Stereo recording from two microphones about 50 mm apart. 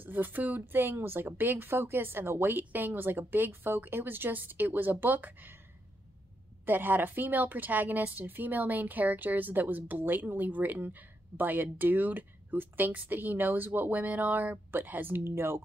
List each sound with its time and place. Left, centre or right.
0.0 s a woman's voice: right
6.6 s a woman's voice: right